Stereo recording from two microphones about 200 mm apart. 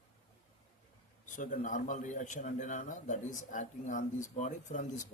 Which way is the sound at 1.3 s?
40° left (ahead or behind).